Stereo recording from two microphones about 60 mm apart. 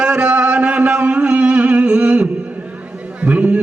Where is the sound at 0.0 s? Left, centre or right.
Centre.